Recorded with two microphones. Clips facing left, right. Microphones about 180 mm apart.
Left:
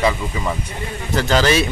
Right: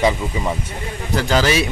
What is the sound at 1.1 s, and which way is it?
Speech, 10° right (ahead or behind).